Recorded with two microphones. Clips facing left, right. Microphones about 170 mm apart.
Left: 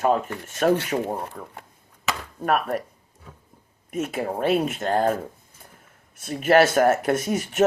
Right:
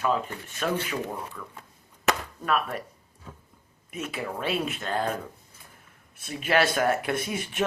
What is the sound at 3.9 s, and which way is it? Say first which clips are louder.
Speech: left 7 dB; 45° left (ahead or behind).